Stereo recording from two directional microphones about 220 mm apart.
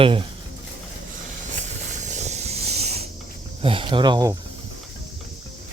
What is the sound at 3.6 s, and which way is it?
Speech, 25° right (ahead or behind).